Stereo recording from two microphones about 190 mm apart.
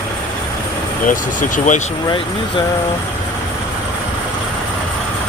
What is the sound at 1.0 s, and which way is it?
Speech, 45° left (ahead or behind).